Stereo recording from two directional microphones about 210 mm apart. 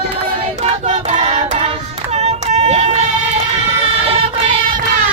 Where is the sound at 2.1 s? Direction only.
30° right (ahead or behind).